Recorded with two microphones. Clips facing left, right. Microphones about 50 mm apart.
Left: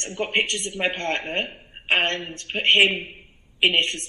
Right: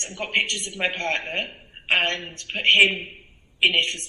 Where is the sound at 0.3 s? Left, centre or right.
Left.